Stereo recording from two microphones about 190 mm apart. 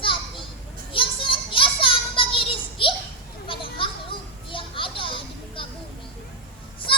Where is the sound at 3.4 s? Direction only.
30° left (ahead or behind).